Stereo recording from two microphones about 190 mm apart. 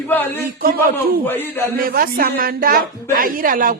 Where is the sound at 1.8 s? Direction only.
50° right (ahead or behind).